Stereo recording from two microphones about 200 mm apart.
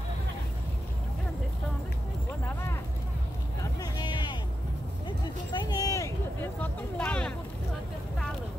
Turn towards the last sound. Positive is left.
turn(degrees=5)  # may be behind; listen again after turning